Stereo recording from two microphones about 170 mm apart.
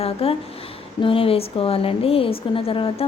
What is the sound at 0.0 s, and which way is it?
A woman's voice, 35° left (ahead or behind).